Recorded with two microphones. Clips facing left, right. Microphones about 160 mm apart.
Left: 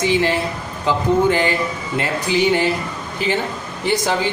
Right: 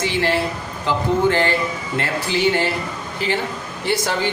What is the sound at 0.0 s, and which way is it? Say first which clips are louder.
Speech: left 2 dB; 15° left (ahead or behind).